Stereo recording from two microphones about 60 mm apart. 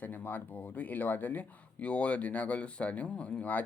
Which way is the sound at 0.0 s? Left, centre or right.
Left.